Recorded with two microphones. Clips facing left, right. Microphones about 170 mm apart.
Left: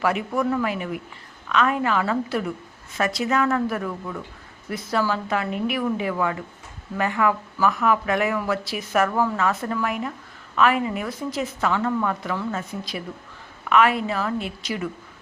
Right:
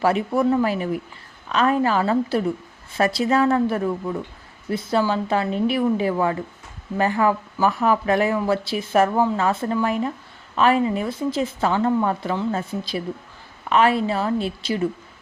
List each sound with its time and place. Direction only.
0.0 s speech: 30° right (ahead or behind)